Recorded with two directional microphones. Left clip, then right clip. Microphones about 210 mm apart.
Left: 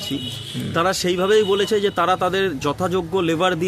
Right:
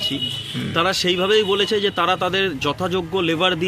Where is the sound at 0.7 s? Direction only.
15° left (ahead or behind).